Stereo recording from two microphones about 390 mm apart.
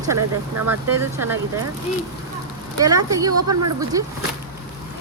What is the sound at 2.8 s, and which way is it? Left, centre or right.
Speech, centre.